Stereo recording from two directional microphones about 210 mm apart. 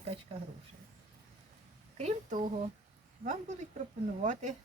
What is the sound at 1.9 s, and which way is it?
Speech, 35° right (ahead or behind).